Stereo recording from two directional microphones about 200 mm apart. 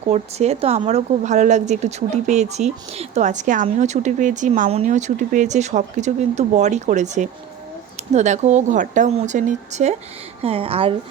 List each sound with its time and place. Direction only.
0.1 s a woman's voice: 30° right (ahead or behind)